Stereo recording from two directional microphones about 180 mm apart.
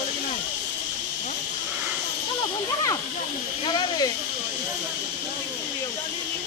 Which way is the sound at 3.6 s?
25° left (ahead or behind).